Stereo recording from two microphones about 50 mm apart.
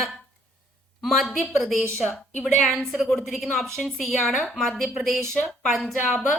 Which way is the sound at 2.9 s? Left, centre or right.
Centre.